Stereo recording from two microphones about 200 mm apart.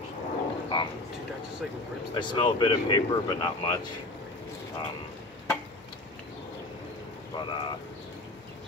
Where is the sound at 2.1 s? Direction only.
25° left (ahead or behind).